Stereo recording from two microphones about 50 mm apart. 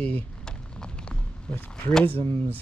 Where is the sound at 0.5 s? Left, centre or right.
Centre.